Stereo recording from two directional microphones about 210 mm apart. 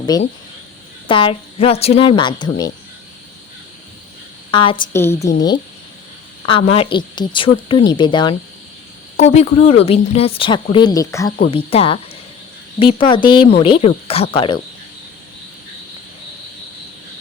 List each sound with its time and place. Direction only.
0.1 s a woman's voice: 20° left (ahead or behind)
4.5 s a woman's voice: 25° left (ahead or behind)
4.9 s a woman's voice: 10° left (ahead or behind)
6.5 s a woman's voice: 25° left (ahead or behind)
11.5 s a woman's voice: 25° left (ahead or behind)